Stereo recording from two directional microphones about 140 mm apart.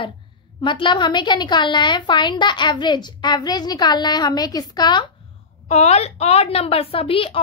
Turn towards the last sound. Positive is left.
turn(degrees=40)  # may be behind; listen again after turning